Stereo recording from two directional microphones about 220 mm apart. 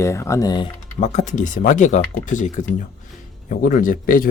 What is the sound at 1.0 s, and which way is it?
Speech, 30° left (ahead or behind).